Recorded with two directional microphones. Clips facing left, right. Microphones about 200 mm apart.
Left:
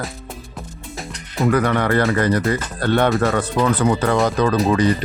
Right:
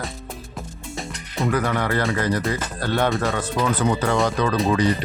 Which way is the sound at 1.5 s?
60° left (ahead or behind).